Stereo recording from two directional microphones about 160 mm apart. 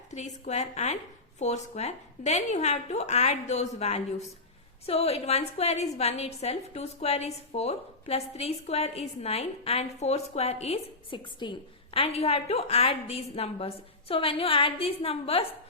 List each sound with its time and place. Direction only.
0.1 s a woman's voice: 45° left (ahead or behind)